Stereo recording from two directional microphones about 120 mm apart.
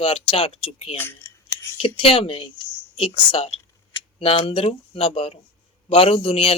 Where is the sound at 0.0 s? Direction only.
50° left (ahead or behind).